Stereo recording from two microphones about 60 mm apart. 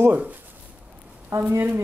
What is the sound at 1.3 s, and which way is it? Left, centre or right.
Speech, right.